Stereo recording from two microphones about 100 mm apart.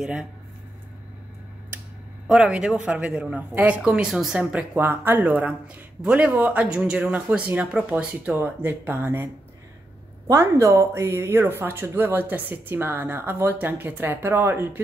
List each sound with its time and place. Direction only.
0.0 s speech: 5° right (ahead or behind)
2.2 s a woman's voice: 5° right (ahead or behind); by 9.3 s 20° right (ahead or behind)
10.4 s speech: 30° right (ahead or behind)